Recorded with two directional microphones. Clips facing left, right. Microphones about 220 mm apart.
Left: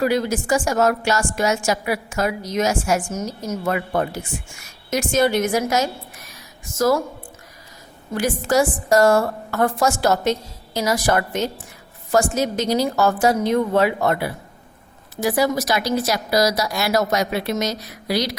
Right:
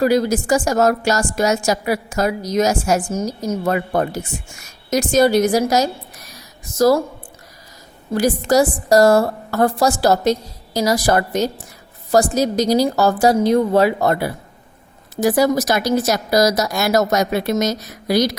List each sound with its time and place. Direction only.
0.0 s a woman's voice: 40° right (ahead or behind)
8.4 s a woman's voice: 35° right (ahead or behind)